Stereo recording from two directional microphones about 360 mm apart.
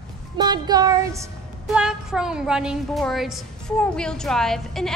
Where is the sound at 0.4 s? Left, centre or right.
Centre.